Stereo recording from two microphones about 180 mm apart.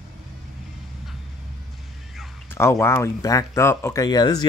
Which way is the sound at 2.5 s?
15° left (ahead or behind).